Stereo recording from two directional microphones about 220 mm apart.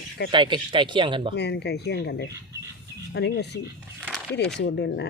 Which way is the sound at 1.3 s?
50° left (ahead or behind).